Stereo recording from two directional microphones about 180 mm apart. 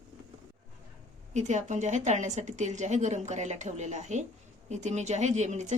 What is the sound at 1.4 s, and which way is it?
Speech, 40° right (ahead or behind).